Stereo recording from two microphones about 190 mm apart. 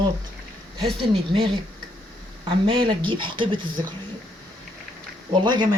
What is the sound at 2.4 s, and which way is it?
Speech, 25° right (ahead or behind).